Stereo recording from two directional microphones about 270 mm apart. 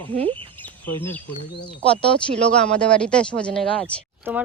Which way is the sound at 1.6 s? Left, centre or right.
Centre.